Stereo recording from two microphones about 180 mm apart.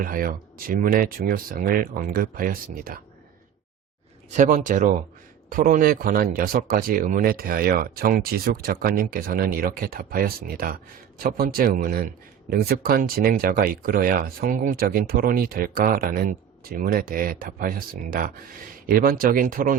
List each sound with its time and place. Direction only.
0.0 s speech: 50° right (ahead or behind)
4.3 s speech: 45° right (ahead or behind)